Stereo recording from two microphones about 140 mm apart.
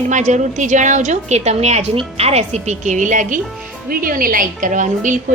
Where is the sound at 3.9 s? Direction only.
90° right; by 5.2 s 65° right (ahead or behind).